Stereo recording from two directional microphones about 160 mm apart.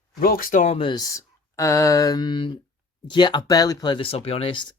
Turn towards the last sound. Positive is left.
turn(degrees=30)  # may be behind; listen again after turning